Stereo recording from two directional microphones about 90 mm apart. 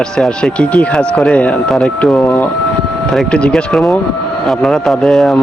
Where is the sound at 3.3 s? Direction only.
10° left (ahead or behind).